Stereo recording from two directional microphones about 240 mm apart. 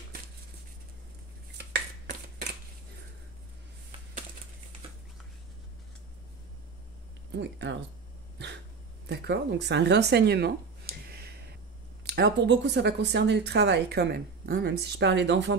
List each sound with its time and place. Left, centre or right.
1.6 s finger snapping: right
7.3 s speech: right
9.0 s speech: right